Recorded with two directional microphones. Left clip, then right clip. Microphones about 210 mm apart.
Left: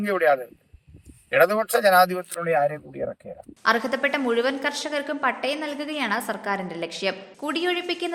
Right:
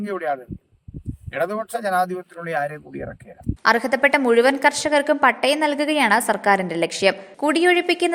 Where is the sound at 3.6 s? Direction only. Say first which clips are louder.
Right 5 dB; 25° right (ahead or behind).